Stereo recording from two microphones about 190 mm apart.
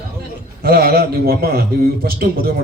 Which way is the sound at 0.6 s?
55° right (ahead or behind).